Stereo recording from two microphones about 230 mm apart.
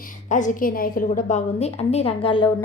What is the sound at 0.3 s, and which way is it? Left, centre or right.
A woman's voice, left.